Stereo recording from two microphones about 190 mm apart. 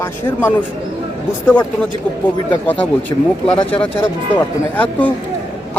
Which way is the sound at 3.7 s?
25° left (ahead or behind).